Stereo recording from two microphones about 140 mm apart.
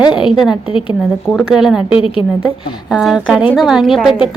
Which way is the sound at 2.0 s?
40° left (ahead or behind).